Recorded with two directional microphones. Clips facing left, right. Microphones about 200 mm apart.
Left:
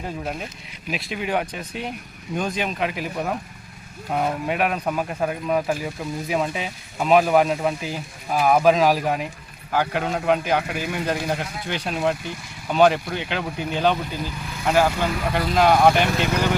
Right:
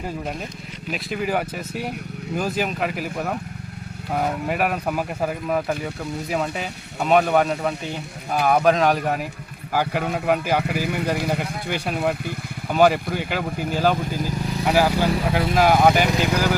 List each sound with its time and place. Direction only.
0.9 s speech: centre (ahead or behind)
14.3 s vehicle: 40° right (ahead or behind)
14.6 s speech: 10° right (ahead or behind)